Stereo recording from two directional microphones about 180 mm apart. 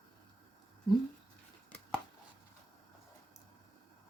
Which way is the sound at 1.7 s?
5° left (ahead or behind).